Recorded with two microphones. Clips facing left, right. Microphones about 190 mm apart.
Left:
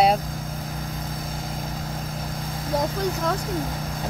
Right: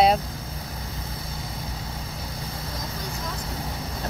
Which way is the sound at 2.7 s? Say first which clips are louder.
Left 15 dB; 50° left (ahead or behind).